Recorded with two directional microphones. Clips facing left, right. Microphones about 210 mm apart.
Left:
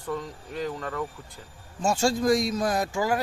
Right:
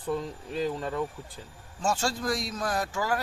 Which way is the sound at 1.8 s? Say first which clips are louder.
Left 5 dB; 10° left (ahead or behind).